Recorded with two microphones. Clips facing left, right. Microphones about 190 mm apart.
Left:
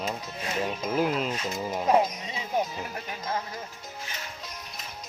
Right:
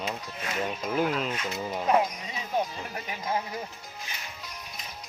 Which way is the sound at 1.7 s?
20° left (ahead or behind).